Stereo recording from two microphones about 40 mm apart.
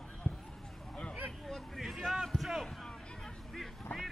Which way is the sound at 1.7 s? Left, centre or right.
Centre.